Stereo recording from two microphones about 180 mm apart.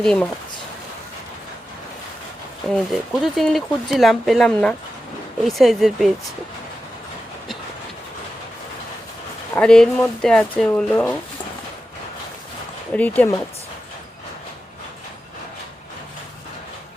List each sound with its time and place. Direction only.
0.0 s speech: 5° left (ahead or behind)
2.6 s speech: centre (ahead or behind)
9.6 s speech: 5° left (ahead or behind)
12.9 s speech: 10° left (ahead or behind)